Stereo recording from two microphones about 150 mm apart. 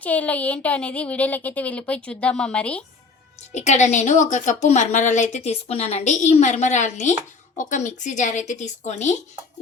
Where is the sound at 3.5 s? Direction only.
50° left (ahead or behind).